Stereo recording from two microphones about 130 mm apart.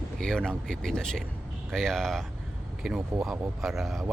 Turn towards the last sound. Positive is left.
turn(degrees=0)  # may be behind; listen again after turning